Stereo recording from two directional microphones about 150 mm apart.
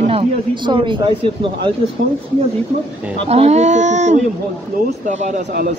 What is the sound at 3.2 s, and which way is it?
Speech, 45° right (ahead or behind).